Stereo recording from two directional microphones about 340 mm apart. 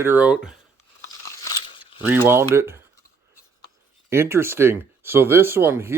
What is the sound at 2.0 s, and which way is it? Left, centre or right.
Speech, centre.